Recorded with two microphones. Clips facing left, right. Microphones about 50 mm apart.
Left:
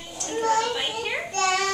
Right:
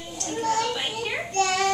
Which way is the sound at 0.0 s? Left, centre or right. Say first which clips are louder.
Left 2 dB; centre.